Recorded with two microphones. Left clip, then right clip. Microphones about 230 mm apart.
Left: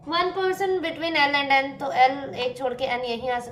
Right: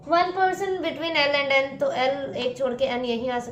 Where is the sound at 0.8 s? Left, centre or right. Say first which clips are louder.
Left 1 dB; left.